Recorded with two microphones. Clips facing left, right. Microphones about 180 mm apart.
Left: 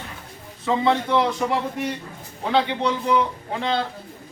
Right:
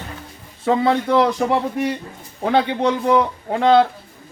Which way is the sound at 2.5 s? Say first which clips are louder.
Right 4 dB; 50° right (ahead or behind).